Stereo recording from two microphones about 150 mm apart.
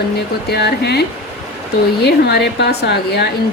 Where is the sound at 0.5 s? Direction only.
90° left.